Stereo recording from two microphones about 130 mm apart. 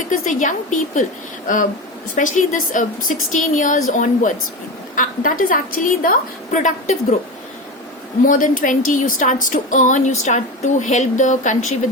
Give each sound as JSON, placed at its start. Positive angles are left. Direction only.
{"t": 0.1, "sound": "speech", "side_deg": 80}
{"t": 2.1, "sound": "a woman's voice", "side_deg": 80}
{"t": 4.9, "sound": "a woman's voice", "side_deg": 90}
{"t": 8.3, "sound": "speech", "side_deg": 90}